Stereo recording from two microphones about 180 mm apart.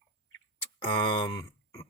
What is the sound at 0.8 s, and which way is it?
Speech, 25° left (ahead or behind).